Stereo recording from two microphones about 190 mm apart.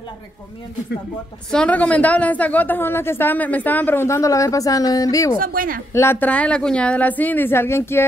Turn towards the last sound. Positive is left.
turn(degrees=15)  # may be behind; listen again after turning